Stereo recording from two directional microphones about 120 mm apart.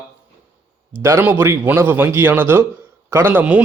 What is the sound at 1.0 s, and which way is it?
A man's voice, 20° right (ahead or behind).